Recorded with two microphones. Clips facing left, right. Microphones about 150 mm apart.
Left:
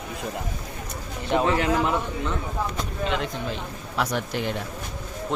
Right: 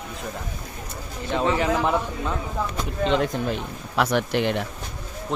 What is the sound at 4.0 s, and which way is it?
Speech, 70° right (ahead or behind).